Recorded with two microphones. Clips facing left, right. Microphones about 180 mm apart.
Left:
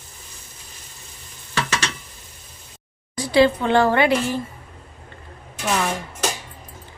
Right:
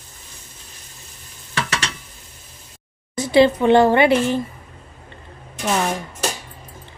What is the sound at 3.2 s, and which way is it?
A woman's voice, 20° right (ahead or behind).